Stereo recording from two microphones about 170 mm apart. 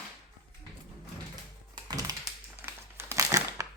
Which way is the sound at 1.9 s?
20° right (ahead or behind).